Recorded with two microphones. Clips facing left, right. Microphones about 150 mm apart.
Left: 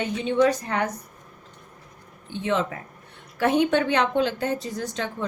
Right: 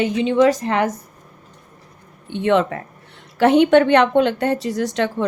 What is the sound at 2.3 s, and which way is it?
Speech, 65° right (ahead or behind).